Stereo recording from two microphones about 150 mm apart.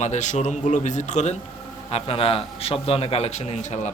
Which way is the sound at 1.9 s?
40° left (ahead or behind).